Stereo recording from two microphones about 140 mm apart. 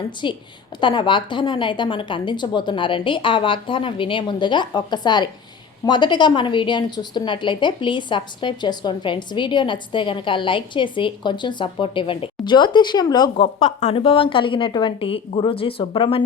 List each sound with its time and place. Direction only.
0.2 s a woman's voice: 35° left (ahead or behind)
13.3 s a woman's voice: 45° left (ahead or behind)